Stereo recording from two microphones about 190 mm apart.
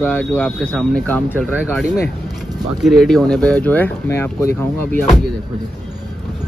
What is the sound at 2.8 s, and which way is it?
Speech, centre (ahead or behind).